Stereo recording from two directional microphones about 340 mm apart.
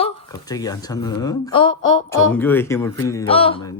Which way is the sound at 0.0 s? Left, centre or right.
Centre.